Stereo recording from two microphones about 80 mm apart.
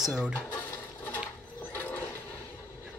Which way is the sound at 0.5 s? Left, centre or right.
Left.